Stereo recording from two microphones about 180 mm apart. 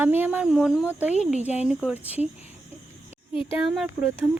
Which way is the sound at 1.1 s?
40° left (ahead or behind).